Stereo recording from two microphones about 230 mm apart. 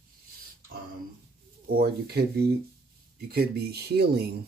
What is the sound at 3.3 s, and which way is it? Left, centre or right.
Speech, right.